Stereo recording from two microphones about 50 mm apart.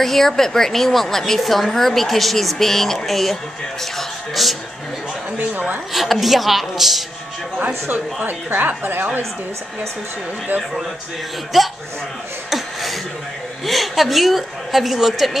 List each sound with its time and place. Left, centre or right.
0.0 s a woman's voice: centre
4.4 s a woman's voice: centre
5.5 s a woman's voice: right
5.9 s a woman's voice: centre
8.2 s a woman's voice: right
11.5 s a woman's voice: centre
12.4 s a sound: centre
13.7 s a woman's voice: centre